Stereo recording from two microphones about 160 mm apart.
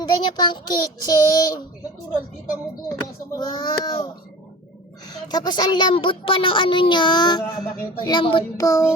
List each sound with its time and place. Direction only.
0.0 s speech: 25° left (ahead or behind)
3.3 s speech: 25° left (ahead or behind)
5.1 s speech: 25° left (ahead or behind)